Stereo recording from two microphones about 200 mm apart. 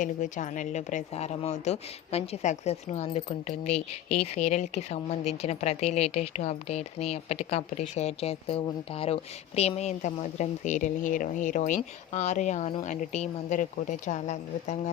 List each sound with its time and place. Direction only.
0.0 s a woman's voice: 40° left (ahead or behind)